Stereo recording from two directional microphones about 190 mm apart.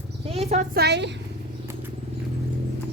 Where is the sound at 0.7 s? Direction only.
60° right (ahead or behind).